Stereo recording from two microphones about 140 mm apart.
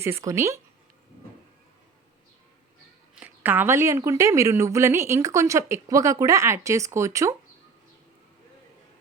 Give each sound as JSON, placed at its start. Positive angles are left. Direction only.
{"t": 0.0, "sound": "a woman's voice", "side_deg": -20}
{"t": 3.2, "sound": "a woman's voice", "side_deg": -10}